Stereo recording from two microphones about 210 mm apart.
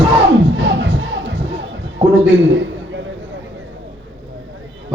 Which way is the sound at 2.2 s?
60° right (ahead or behind).